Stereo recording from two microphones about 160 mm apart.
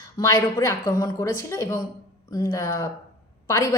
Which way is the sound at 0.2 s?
20° left (ahead or behind).